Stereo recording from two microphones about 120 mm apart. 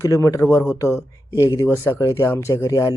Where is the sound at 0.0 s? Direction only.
25° left (ahead or behind).